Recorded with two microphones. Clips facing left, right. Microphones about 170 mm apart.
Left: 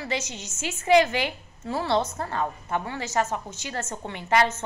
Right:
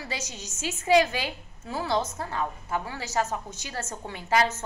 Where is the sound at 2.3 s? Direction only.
30° left (ahead or behind).